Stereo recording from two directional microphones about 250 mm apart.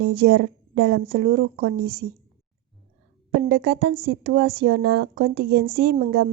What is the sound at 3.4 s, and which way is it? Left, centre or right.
Speech, right.